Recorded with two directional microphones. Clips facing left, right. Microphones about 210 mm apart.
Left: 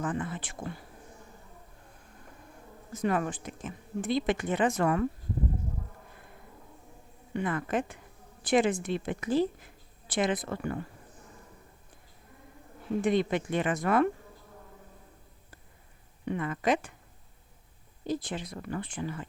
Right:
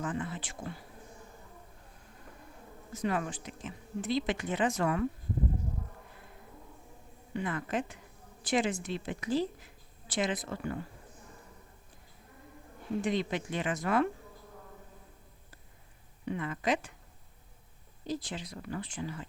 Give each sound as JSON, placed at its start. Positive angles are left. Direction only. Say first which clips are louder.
{"t": 0.0, "sound": "speech", "louder": "left 3 dB", "side_deg": 50}
{"t": 2.9, "sound": "speech", "louder": "left 4 dB", "side_deg": 50}
{"t": 7.3, "sound": "speech", "louder": "left 3 dB", "side_deg": 55}
{"t": 13.0, "sound": "speech", "louder": "left 5 dB", "side_deg": 55}
{"t": 16.2, "sound": "speech", "louder": "left 4 dB", "side_deg": 50}
{"t": 18.0, "sound": "speech", "louder": "left 4 dB", "side_deg": 55}